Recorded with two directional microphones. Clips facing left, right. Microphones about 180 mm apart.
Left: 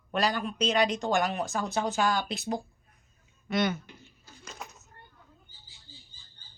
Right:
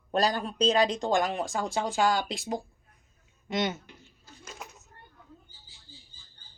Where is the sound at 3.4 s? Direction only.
20° right (ahead or behind).